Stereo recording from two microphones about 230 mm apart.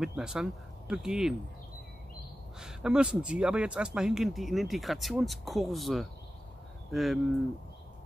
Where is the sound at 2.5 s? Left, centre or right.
Centre.